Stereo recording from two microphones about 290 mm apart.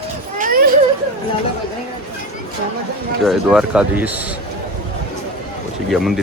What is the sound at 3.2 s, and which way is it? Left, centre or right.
Speech, centre.